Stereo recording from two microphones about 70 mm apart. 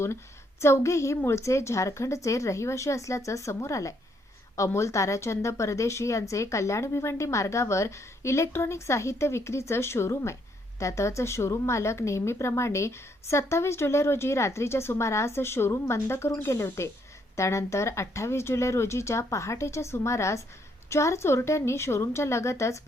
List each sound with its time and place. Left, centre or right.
0.6 s a woman's voice: left